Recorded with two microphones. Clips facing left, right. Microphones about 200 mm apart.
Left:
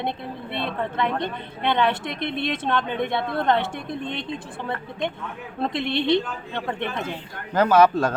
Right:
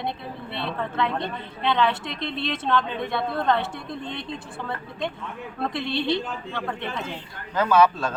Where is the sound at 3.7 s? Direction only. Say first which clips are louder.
Left 3 dB; 15° left (ahead or behind).